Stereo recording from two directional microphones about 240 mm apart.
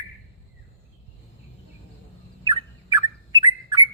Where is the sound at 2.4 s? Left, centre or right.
Centre.